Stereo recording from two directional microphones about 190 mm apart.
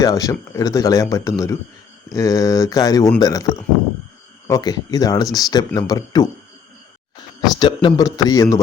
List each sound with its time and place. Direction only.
0.0 s speech: 20° left (ahead or behind)
7.5 s speech: 25° left (ahead or behind)